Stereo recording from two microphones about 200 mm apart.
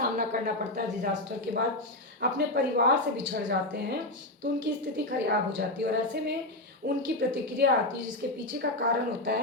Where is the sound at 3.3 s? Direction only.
55° right (ahead or behind).